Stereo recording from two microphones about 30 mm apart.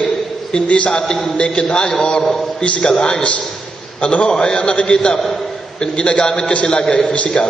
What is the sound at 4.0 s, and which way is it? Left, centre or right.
Speech, left.